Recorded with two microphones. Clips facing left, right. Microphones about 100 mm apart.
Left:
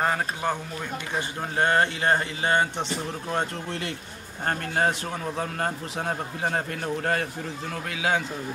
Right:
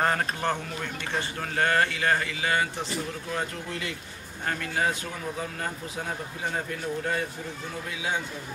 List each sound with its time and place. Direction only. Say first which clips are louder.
0.0 s a man's voice: even; 10° left (ahead or behind)
1.6 s speech: left 2 dB; 25° left (ahead or behind)
4.5 s a man's voice: left 3 dB; 45° left (ahead or behind)
6.0 s a man's voice: left 6 dB; 55° left (ahead or behind)
7.9 s a man's voice: left 6 dB; 70° left (ahead or behind)